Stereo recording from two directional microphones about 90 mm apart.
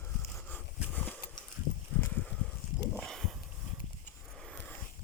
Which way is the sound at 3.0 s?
5° left (ahead or behind).